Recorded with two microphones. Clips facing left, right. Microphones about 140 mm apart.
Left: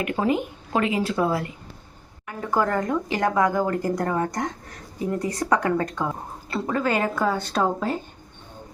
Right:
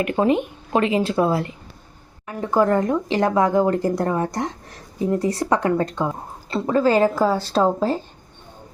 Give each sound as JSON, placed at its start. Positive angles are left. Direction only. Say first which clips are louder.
{"t": 0.0, "sound": "a woman's voice", "louder": "right 4 dB", "side_deg": -25}